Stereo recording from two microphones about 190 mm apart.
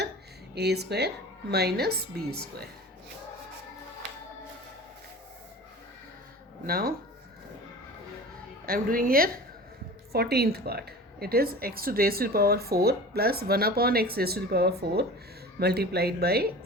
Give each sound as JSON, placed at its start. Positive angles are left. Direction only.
{"t": 0.5, "sound": "speech", "side_deg": -60}
{"t": 6.7, "sound": "speech", "side_deg": -50}
{"t": 8.6, "sound": "speech", "side_deg": -50}